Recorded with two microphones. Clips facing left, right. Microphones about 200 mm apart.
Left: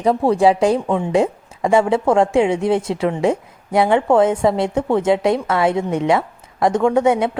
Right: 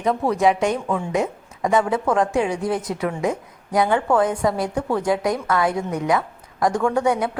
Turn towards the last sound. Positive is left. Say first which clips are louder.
# left 5 dB
turn(degrees=25)  # may be behind; listen again after turning